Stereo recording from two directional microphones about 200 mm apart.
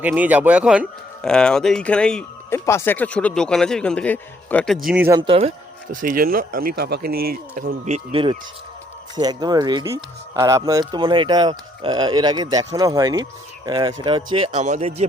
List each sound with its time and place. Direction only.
0.0 s speech: 10° right (ahead or behind)
4.9 s speech: 10° right (ahead or behind)
5.2 s speech: 30° right (ahead or behind)
5.9 s speech: 40° right (ahead or behind)